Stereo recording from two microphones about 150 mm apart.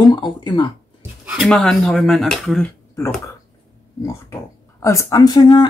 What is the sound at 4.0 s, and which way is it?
Speech, 20° left (ahead or behind).